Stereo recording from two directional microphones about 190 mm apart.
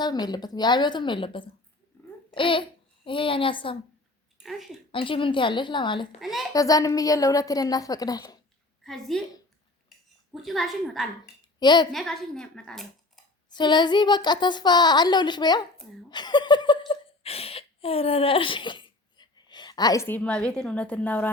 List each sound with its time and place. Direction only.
0.0 s a woman's voice: 20° left (ahead or behind)
4.4 s speech: centre (ahead or behind)
4.9 s a woman's voice: 25° left (ahead or behind)
6.1 s speech: centre (ahead or behind)
6.5 s a woman's voice: 20° left (ahead or behind)
8.8 s a woman's voice: centre (ahead or behind)
10.3 s speech: centre (ahead or behind)
11.6 s a woman's voice: 25° left (ahead or behind)
11.9 s speech: centre (ahead or behind)
13.5 s a woman's voice: 25° left (ahead or behind); by 21.2 s 10° left (ahead or behind)